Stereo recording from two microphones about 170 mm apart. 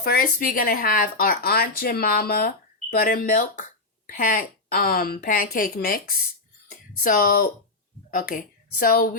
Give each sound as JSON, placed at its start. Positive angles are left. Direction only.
{"t": 0.0, "sound": "speech", "side_deg": 60}
{"t": 6.7, "sound": "a sound", "side_deg": 55}
{"t": 8.1, "sound": "speech", "side_deg": 55}